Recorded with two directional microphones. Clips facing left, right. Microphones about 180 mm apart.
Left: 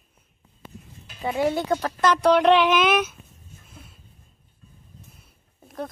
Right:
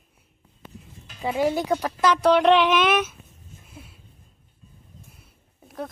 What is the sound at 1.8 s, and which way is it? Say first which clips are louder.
Speech: even; 5° right (ahead or behind).